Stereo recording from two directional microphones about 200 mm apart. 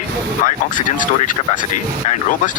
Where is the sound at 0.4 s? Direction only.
40° left (ahead or behind).